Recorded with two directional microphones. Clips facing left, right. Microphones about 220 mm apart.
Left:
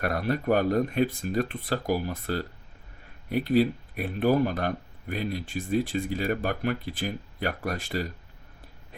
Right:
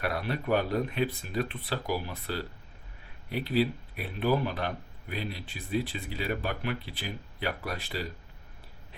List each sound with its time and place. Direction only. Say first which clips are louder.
0.0 s speech: left 5 dB; 45° left (ahead or behind)